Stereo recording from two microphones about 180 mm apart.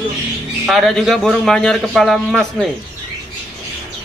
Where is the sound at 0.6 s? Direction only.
Centre (ahead or behind).